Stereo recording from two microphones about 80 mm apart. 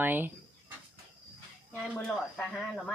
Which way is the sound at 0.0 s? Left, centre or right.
Right.